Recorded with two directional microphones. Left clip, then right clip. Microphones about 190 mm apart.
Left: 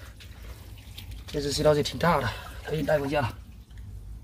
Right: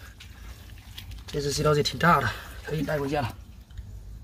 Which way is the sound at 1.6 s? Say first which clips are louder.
Left 1 dB; 40° right (ahead or behind).